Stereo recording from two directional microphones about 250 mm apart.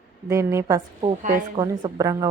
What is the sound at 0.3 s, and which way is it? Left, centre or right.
Speech, centre.